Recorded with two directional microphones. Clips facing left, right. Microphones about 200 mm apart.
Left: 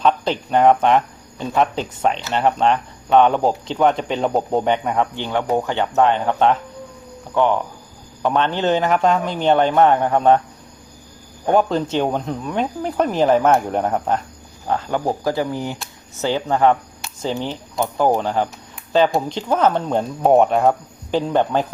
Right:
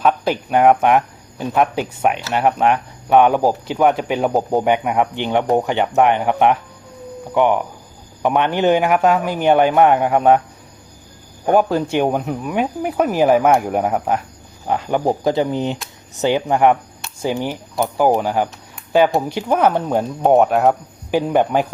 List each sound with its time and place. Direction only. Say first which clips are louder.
0.0 s speech: right 1 dB; 10° right (ahead or behind)
11.4 s speech: right 2 dB; 10° right (ahead or behind)